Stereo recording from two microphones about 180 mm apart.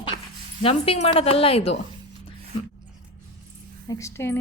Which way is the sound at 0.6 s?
30° left (ahead or behind).